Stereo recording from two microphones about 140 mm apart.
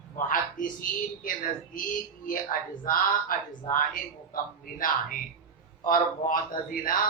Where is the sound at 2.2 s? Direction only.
85° left.